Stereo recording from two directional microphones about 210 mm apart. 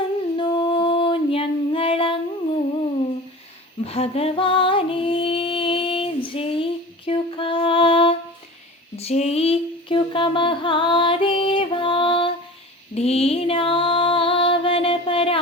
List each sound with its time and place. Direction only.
0.3 s female singing: 20° left (ahead or behind)
3.8 s female singing: 30° left (ahead or behind)
9.0 s a sound: 30° left (ahead or behind)
12.9 s female singing: 30° left (ahead or behind)